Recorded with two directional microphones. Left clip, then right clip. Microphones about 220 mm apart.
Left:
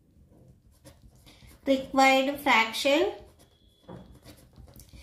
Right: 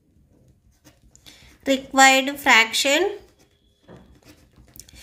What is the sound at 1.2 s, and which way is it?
A woman's voice, 40° right (ahead or behind).